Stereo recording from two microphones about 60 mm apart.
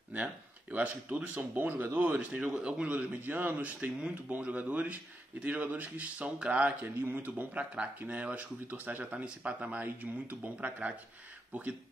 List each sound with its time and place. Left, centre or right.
0.1 s speech: right
2.1 s speech: right
7.0 s speech: right